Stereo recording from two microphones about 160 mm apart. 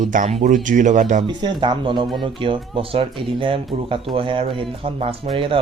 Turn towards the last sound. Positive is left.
turn(degrees=-35)  # may be behind; listen again after turning